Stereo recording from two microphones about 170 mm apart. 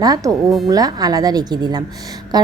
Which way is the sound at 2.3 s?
25° right (ahead or behind).